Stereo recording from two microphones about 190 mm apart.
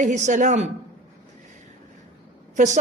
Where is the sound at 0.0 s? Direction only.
40° right (ahead or behind).